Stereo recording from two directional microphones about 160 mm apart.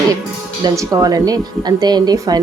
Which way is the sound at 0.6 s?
20° right (ahead or behind).